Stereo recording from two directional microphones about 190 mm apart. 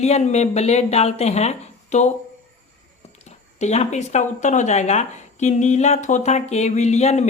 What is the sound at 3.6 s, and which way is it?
Speech, 35° left (ahead or behind).